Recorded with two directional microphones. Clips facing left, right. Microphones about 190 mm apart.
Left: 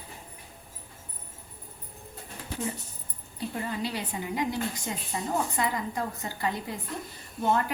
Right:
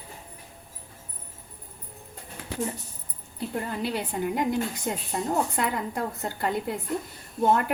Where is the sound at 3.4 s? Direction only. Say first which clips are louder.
Right 2 dB; 55° right (ahead or behind).